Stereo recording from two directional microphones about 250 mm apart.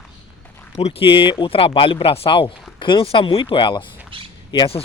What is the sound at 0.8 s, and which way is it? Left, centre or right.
Speech, left.